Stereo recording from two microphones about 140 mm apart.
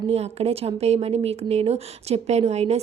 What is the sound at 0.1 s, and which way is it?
Speech, 45° right (ahead or behind).